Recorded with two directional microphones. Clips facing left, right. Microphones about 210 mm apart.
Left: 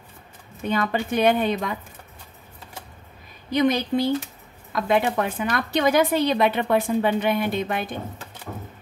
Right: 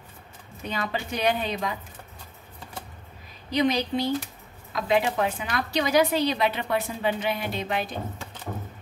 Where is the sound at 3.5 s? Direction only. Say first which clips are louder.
Left 3 dB; 50° left (ahead or behind).